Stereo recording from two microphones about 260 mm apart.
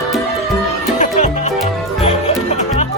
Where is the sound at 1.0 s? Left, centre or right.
Left.